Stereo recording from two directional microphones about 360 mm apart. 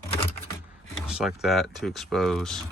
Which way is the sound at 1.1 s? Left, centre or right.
Centre.